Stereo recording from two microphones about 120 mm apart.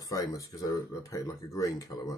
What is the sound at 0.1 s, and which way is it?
Speech, 30° left (ahead or behind).